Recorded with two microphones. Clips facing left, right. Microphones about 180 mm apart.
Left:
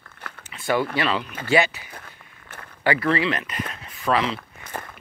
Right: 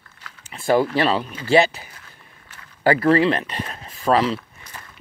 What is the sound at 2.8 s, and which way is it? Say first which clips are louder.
Speech: right 6 dB; 40° right (ahead or behind).